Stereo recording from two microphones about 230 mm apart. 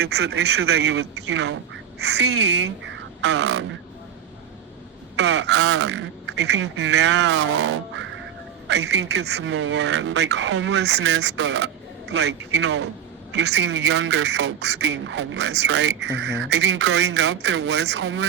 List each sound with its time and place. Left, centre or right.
0.0 s speech: right
5.1 s speech: right